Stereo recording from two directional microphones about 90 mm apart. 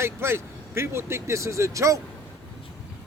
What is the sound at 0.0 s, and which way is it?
Speech, 30° right (ahead or behind).